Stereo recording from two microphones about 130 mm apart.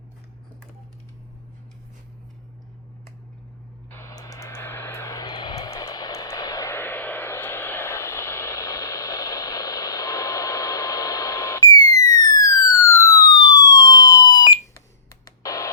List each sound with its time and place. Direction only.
3.8 s vehicle: 20° left (ahead or behind)
13.3 s police car: 30° left (ahead or behind)